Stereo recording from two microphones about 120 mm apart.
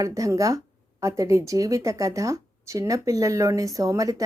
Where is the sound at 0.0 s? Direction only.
30° right (ahead or behind).